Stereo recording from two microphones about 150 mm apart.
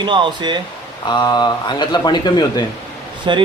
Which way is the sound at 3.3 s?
30° right (ahead or behind).